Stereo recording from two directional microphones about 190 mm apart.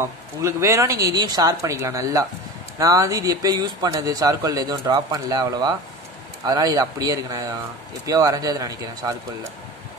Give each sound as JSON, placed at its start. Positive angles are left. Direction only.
{"t": 0.0, "sound": "a man's voice", "side_deg": -15}